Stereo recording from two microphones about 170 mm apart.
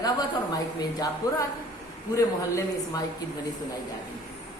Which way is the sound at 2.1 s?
20° left (ahead or behind).